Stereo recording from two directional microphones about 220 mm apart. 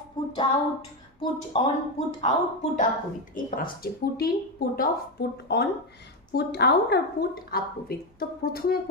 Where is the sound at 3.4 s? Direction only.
40° left (ahead or behind).